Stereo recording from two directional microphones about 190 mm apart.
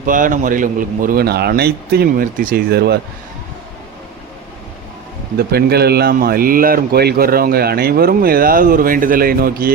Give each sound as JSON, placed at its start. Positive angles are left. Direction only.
{"t": 0.0, "sound": "speech", "side_deg": -45}
{"t": 5.4, "sound": "speech", "side_deg": -55}